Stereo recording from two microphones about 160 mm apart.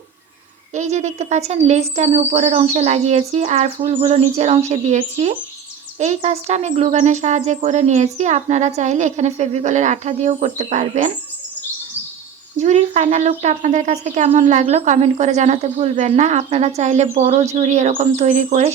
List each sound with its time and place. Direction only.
0.7 s speech: 45° right (ahead or behind)
12.5 s speech: 45° right (ahead or behind)